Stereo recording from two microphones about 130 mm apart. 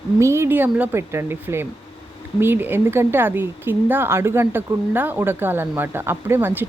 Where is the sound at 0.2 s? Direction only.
20° right (ahead or behind).